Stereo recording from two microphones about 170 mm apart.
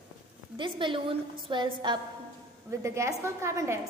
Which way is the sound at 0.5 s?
30° right (ahead or behind).